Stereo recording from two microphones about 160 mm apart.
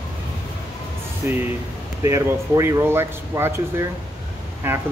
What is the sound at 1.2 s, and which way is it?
Speech, 15° right (ahead or behind).